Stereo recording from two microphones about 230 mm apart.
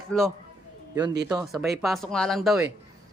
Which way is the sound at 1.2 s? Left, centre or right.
Centre.